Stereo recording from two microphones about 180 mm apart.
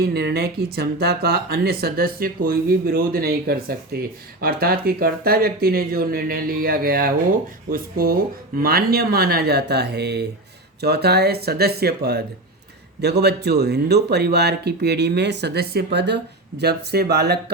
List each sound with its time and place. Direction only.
0.1 s speech: 65° right (ahead or behind)